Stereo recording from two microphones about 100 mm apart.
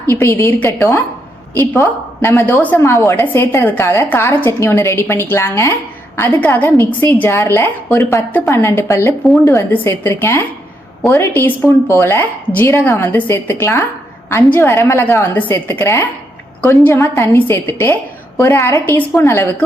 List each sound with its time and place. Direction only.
0.1 s a woman's voice: 25° left (ahead or behind)
2.8 s a woman's voice: 30° left (ahead or behind)